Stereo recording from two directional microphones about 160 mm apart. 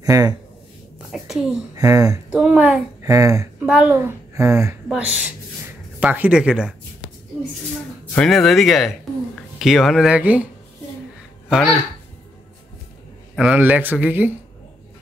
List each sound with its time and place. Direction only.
0.0 s speech: 20° right (ahead or behind)
1.1 s a child's voice: centre (ahead or behind)
1.8 s speech: 20° right (ahead or behind)
2.3 s a child's voice: 5° right (ahead or behind)
3.1 s speech: 20° right (ahead or behind)
3.5 s a woman's voice: 10° right (ahead or behind)
8.1 s speech: 5° left (ahead or behind)
11.4 s speech: centre (ahead or behind)
13.4 s speech: 5° right (ahead or behind)